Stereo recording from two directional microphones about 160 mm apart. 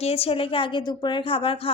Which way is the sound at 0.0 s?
40° left (ahead or behind).